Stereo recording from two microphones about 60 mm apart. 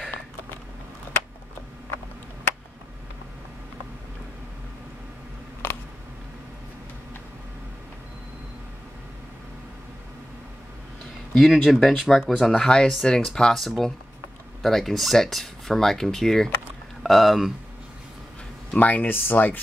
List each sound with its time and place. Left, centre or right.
5.6 s a sound: left
11.3 s speech: centre
18.7 s speech: left